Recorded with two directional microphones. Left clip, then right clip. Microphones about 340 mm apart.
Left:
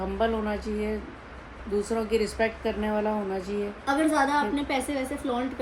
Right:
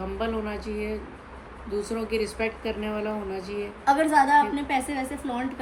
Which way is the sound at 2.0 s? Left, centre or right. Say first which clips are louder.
Left 2 dB; centre.